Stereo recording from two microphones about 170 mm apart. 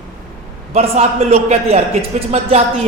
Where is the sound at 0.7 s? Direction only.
40° right (ahead or behind).